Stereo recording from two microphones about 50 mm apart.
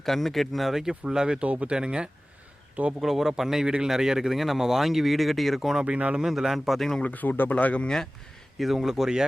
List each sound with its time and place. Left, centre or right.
0.0 s speech: centre
1.5 s speech: right
3.0 s speech: centre
5.8 s speech: right
6.2 s speech: centre
7.0 s speech: left
7.5 s speech: left
8.5 s speech: centre